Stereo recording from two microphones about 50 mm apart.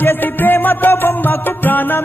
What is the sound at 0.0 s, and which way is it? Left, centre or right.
Music, left.